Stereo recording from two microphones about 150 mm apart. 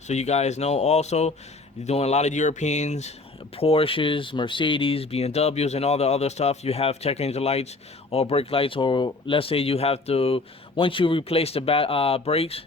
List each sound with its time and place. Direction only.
0.1 s speech: 45° left (ahead or behind)
3.6 s speech: 40° left (ahead or behind)